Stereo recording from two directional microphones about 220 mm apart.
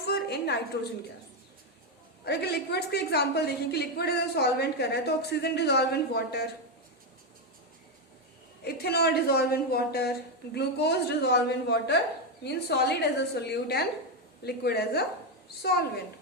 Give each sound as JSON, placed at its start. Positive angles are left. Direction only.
{"t": 0.0, "sound": "a woman's voice", "side_deg": 45}
{"t": 2.2, "sound": "a woman's voice", "side_deg": 45}
{"t": 8.6, "sound": "a woman's voice", "side_deg": 45}